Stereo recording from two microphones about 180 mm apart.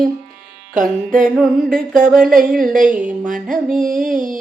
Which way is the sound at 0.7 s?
50° right (ahead or behind).